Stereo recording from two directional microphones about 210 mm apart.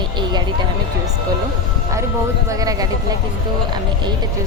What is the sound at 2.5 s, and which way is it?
Speech, 15° right (ahead or behind).